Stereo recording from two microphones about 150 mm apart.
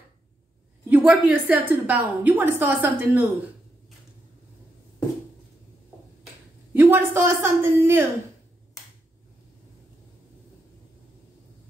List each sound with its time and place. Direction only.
0.8 s a woman's voice: 10° right (ahead or behind)
6.7 s a woman's voice: 15° right (ahead or behind)